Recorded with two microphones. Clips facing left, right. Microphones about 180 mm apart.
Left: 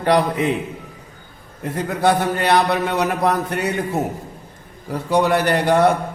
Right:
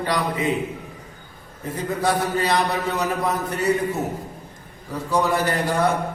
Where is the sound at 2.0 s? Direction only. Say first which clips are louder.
Left 4 dB; 65° left (ahead or behind).